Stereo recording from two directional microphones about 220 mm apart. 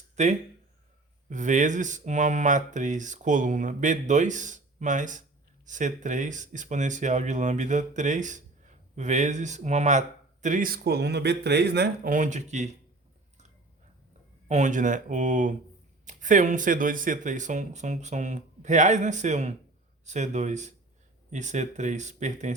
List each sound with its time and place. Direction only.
0.2 s speech: 30° right (ahead or behind)
14.4 s speech: 35° right (ahead or behind)